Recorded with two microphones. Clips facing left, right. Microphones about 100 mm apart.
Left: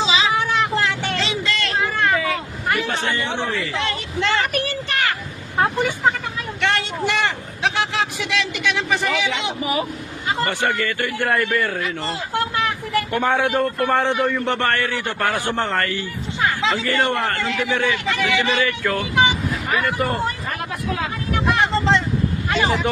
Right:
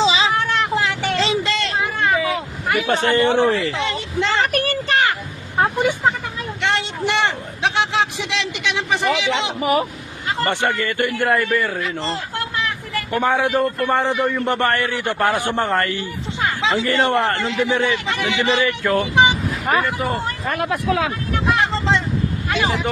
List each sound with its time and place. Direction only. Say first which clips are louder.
0.0 s vehicle: right 3 dB; 30° right (ahead or behind)
0.3 s vehicle: even; 5° left (ahead or behind)
1.2 s a sound: right 4 dB; 25° right (ahead or behind)
1.8 s a sound: even; 15° right (ahead or behind)
2.8 s speech: right 7 dB; 40° right (ahead or behind)
3.8 s speech: right 2 dB; 20° right (ahead or behind)
4.5 s a sound: right 4 dB; 45° right (ahead or behind)
6.6 s vehicle: even; 20° right (ahead or behind)
10.4 s a man's voice: right 2 dB; 20° right (ahead or behind)
14.6 s a man's voice: right 2 dB; 20° right (ahead or behind)
19.8 s speech: left 1 dB; centre (ahead or behind)
20.6 s speech: right 6 dB; 90° right
21.4 s vehicle: even; centre (ahead or behind)
22.4 s speech: left 1 dB; centre (ahead or behind)